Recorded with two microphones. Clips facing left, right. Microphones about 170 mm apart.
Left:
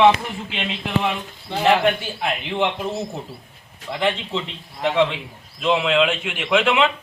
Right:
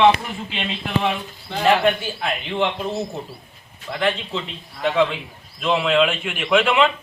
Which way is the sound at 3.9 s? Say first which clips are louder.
Even; 15° left (ahead or behind).